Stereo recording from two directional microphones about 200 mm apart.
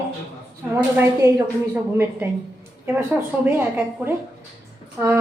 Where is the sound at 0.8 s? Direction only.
10° right (ahead or behind).